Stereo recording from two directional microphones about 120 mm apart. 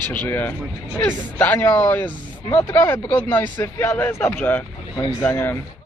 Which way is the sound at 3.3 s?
15° left (ahead or behind).